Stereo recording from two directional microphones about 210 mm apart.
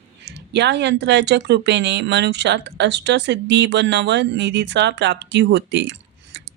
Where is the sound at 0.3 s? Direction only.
55° right (ahead or behind).